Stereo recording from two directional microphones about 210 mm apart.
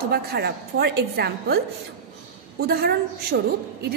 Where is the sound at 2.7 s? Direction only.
50° right (ahead or behind).